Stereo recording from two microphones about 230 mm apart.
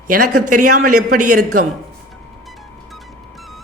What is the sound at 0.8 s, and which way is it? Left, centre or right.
Speech, right.